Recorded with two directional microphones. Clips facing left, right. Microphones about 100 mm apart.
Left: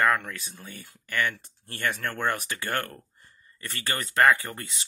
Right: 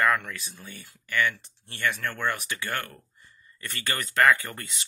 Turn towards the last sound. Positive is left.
turn(degrees=20)  # may be behind; listen again after turning